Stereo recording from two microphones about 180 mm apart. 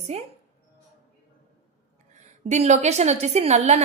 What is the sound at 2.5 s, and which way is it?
A woman's voice, 40° right (ahead or behind).